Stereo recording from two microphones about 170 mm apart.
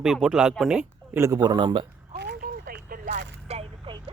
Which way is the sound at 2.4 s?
60° right (ahead or behind).